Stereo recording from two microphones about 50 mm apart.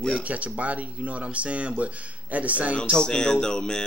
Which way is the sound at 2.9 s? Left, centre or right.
Centre.